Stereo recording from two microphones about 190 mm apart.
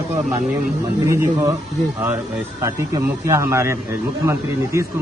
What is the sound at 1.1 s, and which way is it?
Speech, 15° right (ahead or behind).